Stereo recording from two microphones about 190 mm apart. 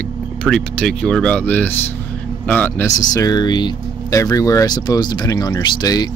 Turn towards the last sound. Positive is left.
turn(degrees=20)  # may be behind; listen again after turning